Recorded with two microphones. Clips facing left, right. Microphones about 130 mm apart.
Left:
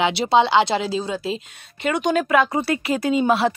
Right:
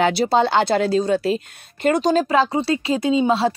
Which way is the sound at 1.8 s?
40° right (ahead or behind).